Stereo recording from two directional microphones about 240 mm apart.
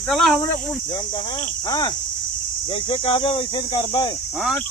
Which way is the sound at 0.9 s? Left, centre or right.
Centre.